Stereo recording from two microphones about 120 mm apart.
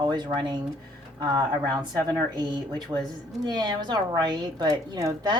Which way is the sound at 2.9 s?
30° right (ahead or behind).